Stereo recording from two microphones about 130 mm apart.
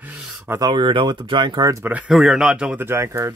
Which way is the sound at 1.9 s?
10° right (ahead or behind).